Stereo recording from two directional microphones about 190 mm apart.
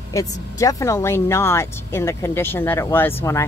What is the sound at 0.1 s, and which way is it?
Speech, 20° left (ahead or behind).